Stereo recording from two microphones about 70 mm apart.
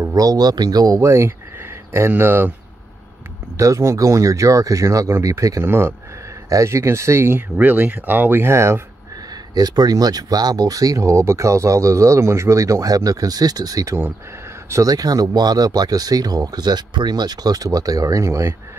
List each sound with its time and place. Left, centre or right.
0.0 s speech: right
3.5 s speech: right
5.6 s speech: right
6.5 s speech: right
7.5 s speech: right
8.5 s speech: right
9.3 s speech: right